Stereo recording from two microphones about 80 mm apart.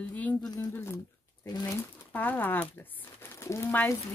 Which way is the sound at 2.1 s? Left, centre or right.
Left.